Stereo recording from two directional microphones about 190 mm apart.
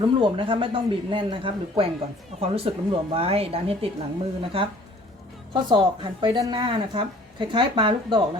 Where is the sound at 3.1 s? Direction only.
30° right (ahead or behind).